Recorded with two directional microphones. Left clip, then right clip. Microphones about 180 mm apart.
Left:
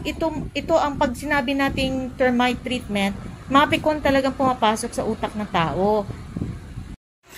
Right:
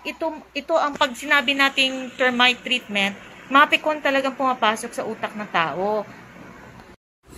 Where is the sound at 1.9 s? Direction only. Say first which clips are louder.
Right 1 dB; 20° left (ahead or behind).